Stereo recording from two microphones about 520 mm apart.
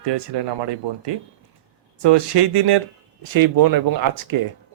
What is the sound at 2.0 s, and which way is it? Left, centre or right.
Speech, right.